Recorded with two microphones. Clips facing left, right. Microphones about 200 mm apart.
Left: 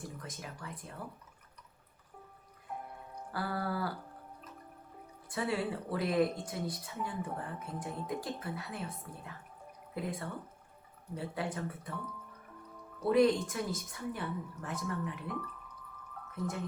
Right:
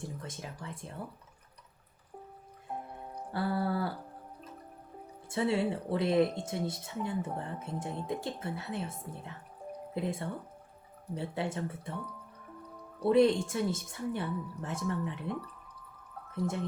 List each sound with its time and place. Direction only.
0.0 s speech: 25° right (ahead or behind)
2.7 s music: 30° right (ahead or behind)
3.2 s a sound: 25° right (ahead or behind)
5.3 s speech: 25° right (ahead or behind)
13.0 s speech: 25° right (ahead or behind)